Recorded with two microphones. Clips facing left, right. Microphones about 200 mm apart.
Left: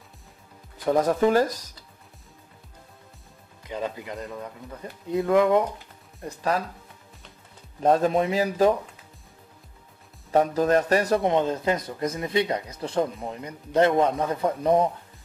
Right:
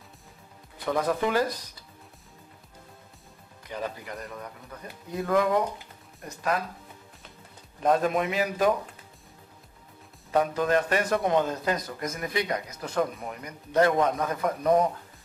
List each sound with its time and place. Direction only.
0.8 s speech: 40° left (ahead or behind)
3.6 s a man's voice: 20° left (ahead or behind)
7.8 s a man's voice: 30° left (ahead or behind)
10.3 s speech: 35° left (ahead or behind)